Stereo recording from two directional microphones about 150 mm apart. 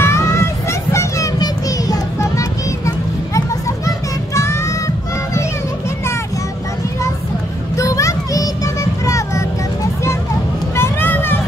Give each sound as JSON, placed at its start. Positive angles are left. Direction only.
{"t": 0.0, "sound": "music", "side_deg": 20}
{"t": 3.3, "sound": "children playing", "side_deg": 20}
{"t": 7.7, "sound": "a sound", "side_deg": 20}
{"t": 9.0, "sound": "vehicle", "side_deg": 20}
{"t": 10.8, "sound": "vehicle", "side_deg": 15}